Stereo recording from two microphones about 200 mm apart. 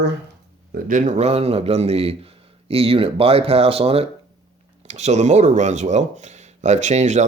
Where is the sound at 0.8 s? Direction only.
40° right (ahead or behind).